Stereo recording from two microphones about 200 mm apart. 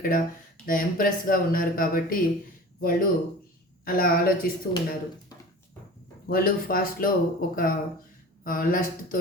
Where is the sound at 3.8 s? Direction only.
45° left (ahead or behind).